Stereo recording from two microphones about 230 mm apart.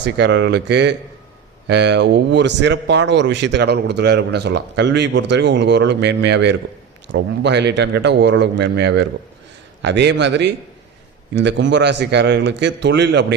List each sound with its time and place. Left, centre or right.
0.0 s a man's voice: right